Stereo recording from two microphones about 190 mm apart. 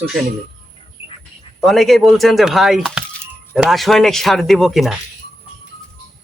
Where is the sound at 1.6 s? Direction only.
Centre (ahead or behind).